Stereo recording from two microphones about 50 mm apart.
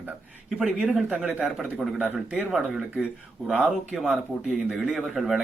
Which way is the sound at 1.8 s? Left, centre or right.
Centre.